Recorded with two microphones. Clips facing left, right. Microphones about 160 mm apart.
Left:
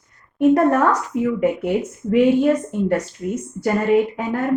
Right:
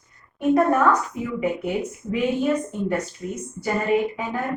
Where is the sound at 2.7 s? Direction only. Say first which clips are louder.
Left 5 dB; 70° left (ahead or behind).